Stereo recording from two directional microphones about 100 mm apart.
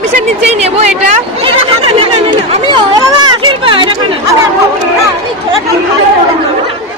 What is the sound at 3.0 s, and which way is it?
Children playing, 35° right (ahead or behind).